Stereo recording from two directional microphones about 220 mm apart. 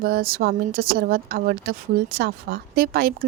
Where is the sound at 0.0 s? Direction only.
45° right (ahead or behind).